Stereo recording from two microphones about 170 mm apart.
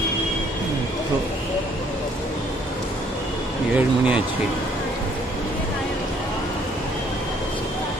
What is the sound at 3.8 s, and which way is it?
Speech, 10° right (ahead or behind).